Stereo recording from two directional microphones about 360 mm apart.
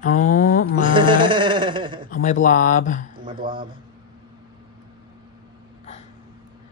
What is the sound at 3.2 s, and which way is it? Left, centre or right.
Speech, centre.